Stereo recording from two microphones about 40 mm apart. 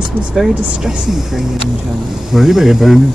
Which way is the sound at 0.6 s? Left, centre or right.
Right.